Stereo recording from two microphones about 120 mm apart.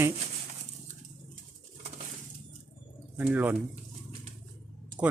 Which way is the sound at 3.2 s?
15° right (ahead or behind).